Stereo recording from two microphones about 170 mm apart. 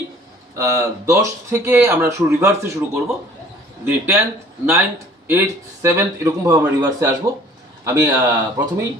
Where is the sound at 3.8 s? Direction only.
15° right (ahead or behind).